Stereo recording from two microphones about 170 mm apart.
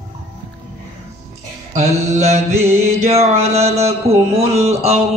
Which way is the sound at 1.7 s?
40° right (ahead or behind).